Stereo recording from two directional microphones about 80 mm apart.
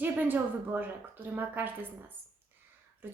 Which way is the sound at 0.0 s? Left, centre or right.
Right.